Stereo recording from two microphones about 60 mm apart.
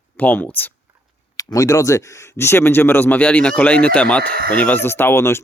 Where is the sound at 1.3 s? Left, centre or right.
Left.